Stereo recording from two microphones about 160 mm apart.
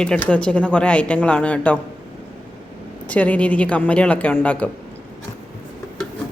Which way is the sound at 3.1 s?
10° left (ahead or behind).